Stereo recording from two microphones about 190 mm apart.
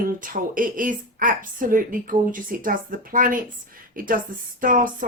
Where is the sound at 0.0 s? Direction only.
45° right (ahead or behind).